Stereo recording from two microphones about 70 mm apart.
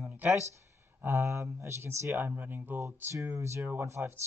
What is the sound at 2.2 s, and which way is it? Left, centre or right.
Speech, right.